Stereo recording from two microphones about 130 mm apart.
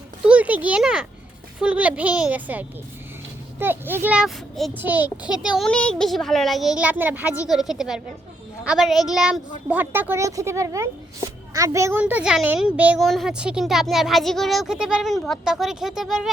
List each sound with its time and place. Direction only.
0.3 s a woman's voice: 10° right (ahead or behind)
5.4 s a woman's voice: 5° right (ahead or behind)
13.0 s speech: centre (ahead or behind)